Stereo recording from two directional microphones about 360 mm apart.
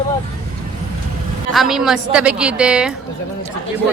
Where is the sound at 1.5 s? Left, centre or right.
Centre.